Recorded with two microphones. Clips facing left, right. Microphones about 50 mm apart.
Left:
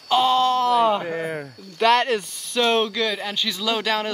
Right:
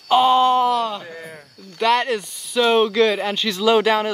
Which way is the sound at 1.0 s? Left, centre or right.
Left.